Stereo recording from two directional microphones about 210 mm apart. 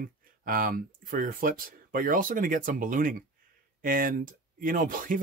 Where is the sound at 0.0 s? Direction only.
40° right (ahead or behind).